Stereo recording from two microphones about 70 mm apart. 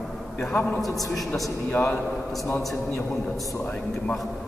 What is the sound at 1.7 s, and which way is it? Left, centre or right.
Speech, left.